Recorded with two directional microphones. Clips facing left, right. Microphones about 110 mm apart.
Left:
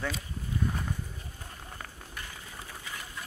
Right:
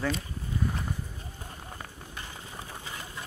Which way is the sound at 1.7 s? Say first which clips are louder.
Right 1 dB; 25° right (ahead or behind).